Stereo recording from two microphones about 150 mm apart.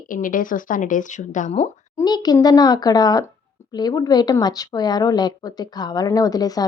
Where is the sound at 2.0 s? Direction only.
25° left (ahead or behind).